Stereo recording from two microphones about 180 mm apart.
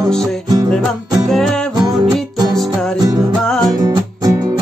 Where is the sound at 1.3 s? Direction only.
5° left (ahead or behind).